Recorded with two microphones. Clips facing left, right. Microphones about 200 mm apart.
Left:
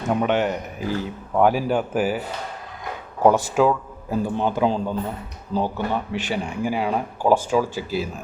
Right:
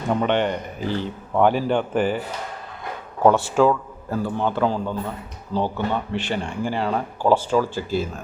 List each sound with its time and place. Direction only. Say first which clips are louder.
0.1 s a man's voice: even; 5° left (ahead or behind)
3.2 s speech: even; 5° left (ahead or behind)